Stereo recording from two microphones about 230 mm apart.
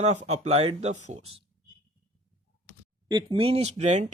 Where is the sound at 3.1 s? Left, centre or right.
Centre.